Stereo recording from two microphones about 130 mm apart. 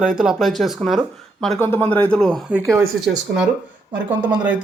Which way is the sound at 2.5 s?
20° right (ahead or behind).